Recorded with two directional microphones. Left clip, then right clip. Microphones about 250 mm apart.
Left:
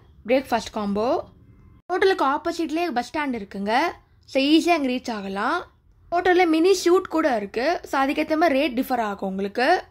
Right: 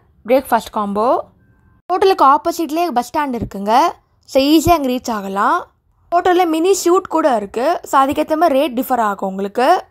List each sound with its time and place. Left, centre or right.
0.2 s speech: centre